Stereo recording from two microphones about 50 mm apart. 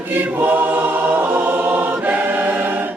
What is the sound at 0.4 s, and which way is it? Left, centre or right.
Choir, right.